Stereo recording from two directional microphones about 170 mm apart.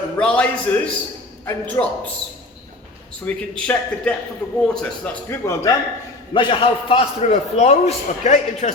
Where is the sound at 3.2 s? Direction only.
5° left (ahead or behind).